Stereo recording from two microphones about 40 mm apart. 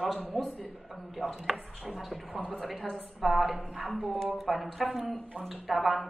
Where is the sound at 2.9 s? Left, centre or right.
Centre.